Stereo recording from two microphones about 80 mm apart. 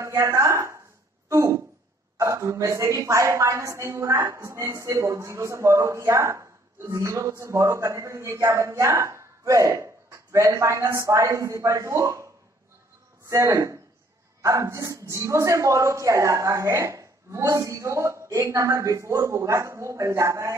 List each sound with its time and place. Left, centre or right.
0.0 s a sound: right
2.1 s a woman's voice: right
13.3 s a woman's voice: right